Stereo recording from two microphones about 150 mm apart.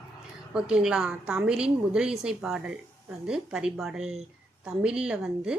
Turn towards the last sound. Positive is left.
turn(degrees=-5)  # may be behind; listen again after turning